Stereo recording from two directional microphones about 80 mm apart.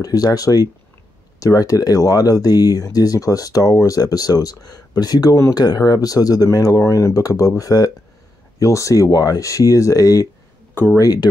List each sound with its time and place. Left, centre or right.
0.0 s speech: left
6.8 s speech: left